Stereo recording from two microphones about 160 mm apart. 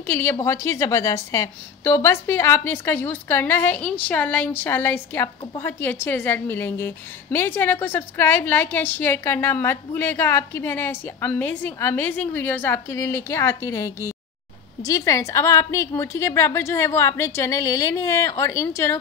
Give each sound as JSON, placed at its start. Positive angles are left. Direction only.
{"t": 0.0, "sound": "a woman's voice", "side_deg": 15}